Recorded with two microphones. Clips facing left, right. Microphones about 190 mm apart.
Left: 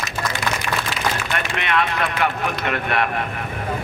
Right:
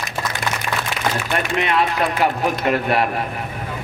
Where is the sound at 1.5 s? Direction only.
35° right (ahead or behind).